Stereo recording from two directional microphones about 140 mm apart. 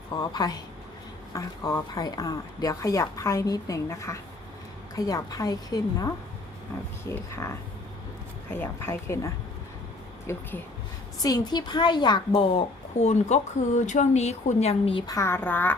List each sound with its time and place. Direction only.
0.2 s a woman's voice: 25° left (ahead or behind); by 15.0 s 45° left (ahead or behind)
15.0 s a woman's voice: 20° left (ahead or behind)